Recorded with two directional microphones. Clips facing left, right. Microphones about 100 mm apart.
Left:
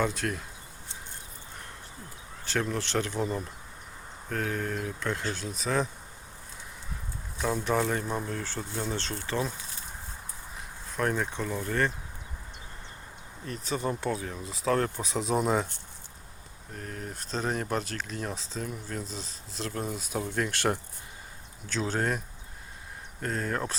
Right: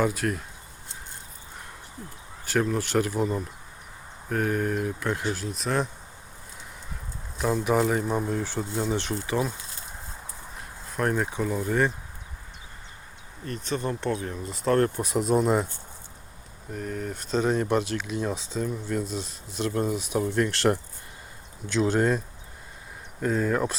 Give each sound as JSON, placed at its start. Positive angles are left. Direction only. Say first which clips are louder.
{"t": 0.0, "sound": "speech", "louder": "right 4 dB", "side_deg": -5}
{"t": 2.4, "sound": "speech", "louder": "right 5 dB", "side_deg": -5}
{"t": 7.3, "sound": "speech", "louder": "right 4 dB", "side_deg": -5}
{"t": 10.6, "sound": "speech", "louder": "right 2 dB", "side_deg": -5}
{"t": 13.4, "sound": "speech", "louder": "right 2 dB", "side_deg": 5}
{"t": 16.7, "sound": "speech", "louder": "right 7 dB", "side_deg": 0}
{"t": 21.8, "sound": "speech", "louder": "right 7 dB", "side_deg": -5}
{"t": 23.2, "sound": "speech", "louder": "right 7 dB", "side_deg": -5}